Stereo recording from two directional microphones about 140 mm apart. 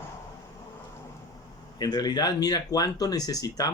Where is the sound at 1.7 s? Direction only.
30° left (ahead or behind).